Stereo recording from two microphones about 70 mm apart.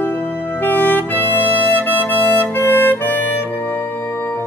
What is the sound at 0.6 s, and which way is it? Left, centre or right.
Music, left.